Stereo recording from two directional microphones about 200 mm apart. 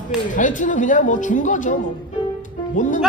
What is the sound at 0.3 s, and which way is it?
Speech, 40° left (ahead or behind).